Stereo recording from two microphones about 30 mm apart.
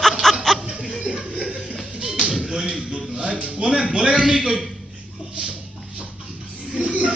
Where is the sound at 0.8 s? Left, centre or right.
Centre.